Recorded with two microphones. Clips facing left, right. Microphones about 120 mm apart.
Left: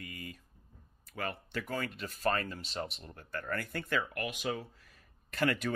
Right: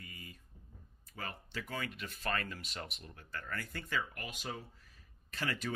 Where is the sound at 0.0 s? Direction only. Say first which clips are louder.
Left 7 dB; 75° left (ahead or behind).